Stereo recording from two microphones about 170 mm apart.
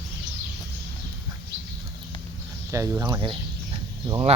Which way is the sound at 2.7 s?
15° right (ahead or behind).